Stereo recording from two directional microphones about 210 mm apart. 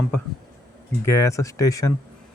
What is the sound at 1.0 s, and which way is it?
Speech, 15° left (ahead or behind).